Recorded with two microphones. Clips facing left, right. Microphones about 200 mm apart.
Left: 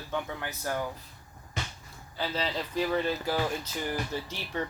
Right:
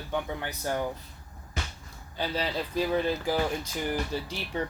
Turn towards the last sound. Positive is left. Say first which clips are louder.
# right 2 dB
turn(degrees=-15)  # may be behind; listen again after turning